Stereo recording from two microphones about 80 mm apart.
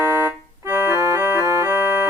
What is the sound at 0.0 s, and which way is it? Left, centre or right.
Organ, right.